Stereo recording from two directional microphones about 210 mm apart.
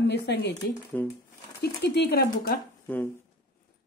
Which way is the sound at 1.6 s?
50° left (ahead or behind).